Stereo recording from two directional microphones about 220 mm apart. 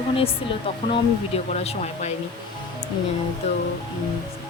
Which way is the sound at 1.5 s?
30° left (ahead or behind).